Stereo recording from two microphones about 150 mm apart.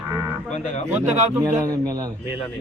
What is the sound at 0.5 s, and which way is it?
Speech, 50° left (ahead or behind).